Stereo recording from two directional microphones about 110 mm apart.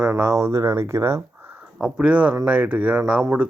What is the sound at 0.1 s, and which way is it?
Speech, 25° right (ahead or behind).